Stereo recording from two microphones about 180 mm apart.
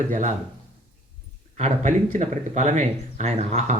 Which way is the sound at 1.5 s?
40° right (ahead or behind).